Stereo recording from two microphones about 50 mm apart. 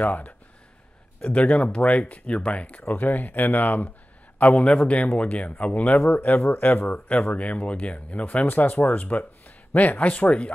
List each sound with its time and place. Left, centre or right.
0.0 s speech: left
1.3 s speech: left
6.9 s speech: left
8.5 s speech: left